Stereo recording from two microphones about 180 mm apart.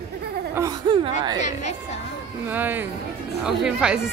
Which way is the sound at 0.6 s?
25° right (ahead or behind).